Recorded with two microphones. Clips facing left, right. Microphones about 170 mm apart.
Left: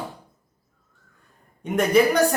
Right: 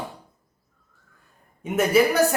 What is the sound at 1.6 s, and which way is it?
Speech, 5° right (ahead or behind).